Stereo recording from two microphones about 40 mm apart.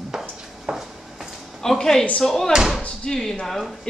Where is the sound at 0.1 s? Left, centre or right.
Centre.